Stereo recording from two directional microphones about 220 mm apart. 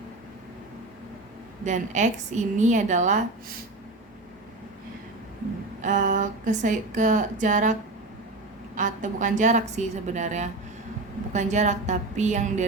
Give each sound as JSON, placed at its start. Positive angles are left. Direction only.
{"t": 1.6, "sound": "speech", "side_deg": -35}
{"t": 5.8, "sound": "speech", "side_deg": -35}